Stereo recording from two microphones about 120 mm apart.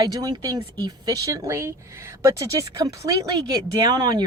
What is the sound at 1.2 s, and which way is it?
Speech, 25° right (ahead or behind).